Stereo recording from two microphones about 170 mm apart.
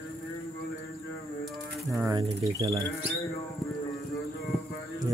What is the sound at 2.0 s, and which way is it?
Bird, 20° right (ahead or behind).